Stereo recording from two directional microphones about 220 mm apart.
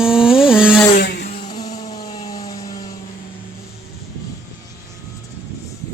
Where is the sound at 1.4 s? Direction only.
20° left (ahead or behind).